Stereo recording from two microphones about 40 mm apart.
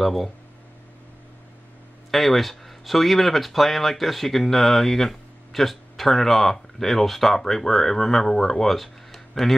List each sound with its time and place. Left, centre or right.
0.0 s speech: centre
2.0 s speech: centre